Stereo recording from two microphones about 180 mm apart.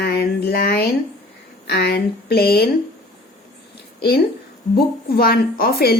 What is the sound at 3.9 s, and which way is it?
A woman's voice, 60° left (ahead or behind).